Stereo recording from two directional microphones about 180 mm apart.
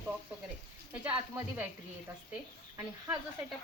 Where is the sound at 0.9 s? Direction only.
10° right (ahead or behind).